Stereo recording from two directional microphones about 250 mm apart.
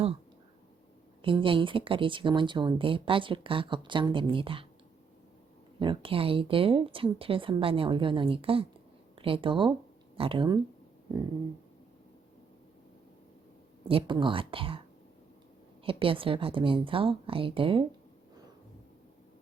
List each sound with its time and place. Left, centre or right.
1.2 s speech: right
5.8 s speech: centre
13.8 s speech: right
15.8 s speech: right